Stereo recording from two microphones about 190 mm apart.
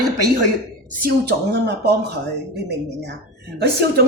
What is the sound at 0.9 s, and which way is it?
Speech, 55° right (ahead or behind).